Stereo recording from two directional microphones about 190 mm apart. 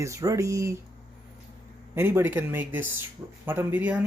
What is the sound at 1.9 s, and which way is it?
Speech, 15° right (ahead or behind).